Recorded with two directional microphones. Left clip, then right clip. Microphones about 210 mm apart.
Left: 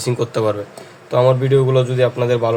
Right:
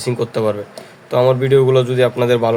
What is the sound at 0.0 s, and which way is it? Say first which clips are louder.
Speech: even; 5° right (ahead or behind).